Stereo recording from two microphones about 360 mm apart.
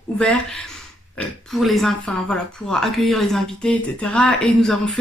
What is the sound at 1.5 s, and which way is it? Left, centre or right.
Speech, centre.